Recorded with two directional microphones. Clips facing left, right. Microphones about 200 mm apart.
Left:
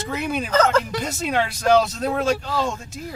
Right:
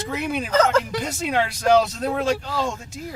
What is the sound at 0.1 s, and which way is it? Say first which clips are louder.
Speech: left 1 dB; 15° right (ahead or behind).